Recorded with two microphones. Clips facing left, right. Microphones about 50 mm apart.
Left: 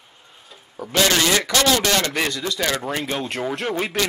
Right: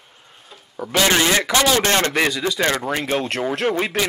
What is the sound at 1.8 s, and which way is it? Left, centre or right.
Speech, right.